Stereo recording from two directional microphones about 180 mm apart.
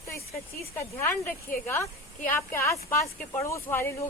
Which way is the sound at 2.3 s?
15° left (ahead or behind).